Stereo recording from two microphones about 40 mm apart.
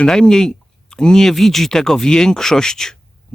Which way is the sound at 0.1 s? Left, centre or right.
Centre.